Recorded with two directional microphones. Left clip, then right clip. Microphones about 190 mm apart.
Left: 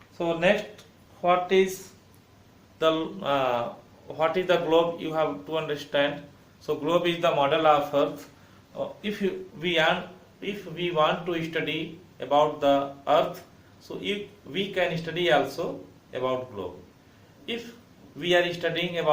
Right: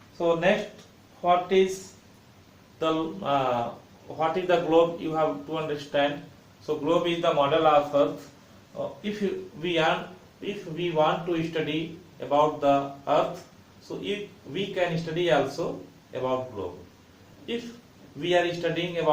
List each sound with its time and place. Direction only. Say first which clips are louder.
0.3 s a man's voice: right 1 dB; 35° left (ahead or behind)
2.7 s a man's voice: left 2 dB; 20° left (ahead or behind)
9.0 s a man's voice: left 1 dB; 20° left (ahead or behind)
17.4 s a man's voice: right 1 dB; 15° left (ahead or behind)